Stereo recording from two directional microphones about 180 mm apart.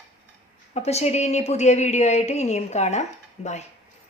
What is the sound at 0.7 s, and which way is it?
Speech, 35° left (ahead or behind).